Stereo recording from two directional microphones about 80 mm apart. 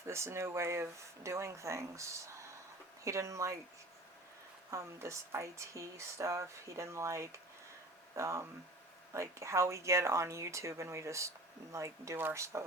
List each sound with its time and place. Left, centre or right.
0.1 s speech: right
4.7 s speech: right